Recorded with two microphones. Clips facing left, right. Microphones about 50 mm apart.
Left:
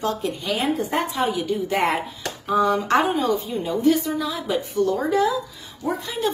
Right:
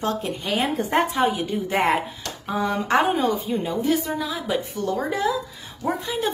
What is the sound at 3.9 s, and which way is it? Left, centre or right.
Speech, centre.